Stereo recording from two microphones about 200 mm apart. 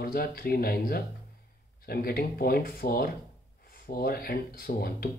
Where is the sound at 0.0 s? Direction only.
50° left (ahead or behind).